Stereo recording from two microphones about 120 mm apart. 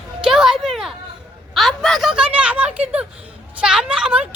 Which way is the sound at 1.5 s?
Centre (ahead or behind).